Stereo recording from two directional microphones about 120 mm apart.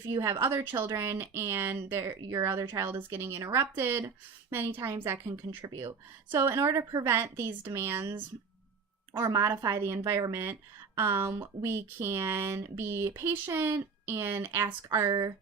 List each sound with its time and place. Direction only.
0.4 s speech: 20° right (ahead or behind)
2.0 s speech: 35° right (ahead or behind)
2.4 s speech: 20° right (ahead or behind)
6.3 s speech: 20° right (ahead or behind)
9.1 s speech: 20° right (ahead or behind)